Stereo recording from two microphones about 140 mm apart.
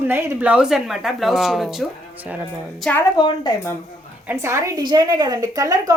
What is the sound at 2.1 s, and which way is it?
Speech, 10° right (ahead or behind).